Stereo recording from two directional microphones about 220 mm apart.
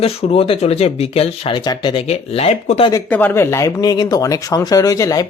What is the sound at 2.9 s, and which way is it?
Speech, 10° left (ahead or behind).